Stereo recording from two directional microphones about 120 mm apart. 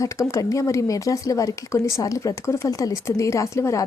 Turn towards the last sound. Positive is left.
turn(degrees=25)  # may be behind; listen again after turning